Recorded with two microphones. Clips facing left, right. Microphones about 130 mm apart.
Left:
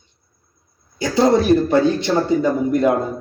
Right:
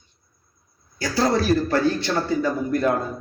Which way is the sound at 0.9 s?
20° left (ahead or behind).